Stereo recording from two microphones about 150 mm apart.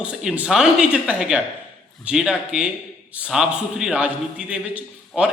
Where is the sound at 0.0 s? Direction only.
5° right (ahead or behind).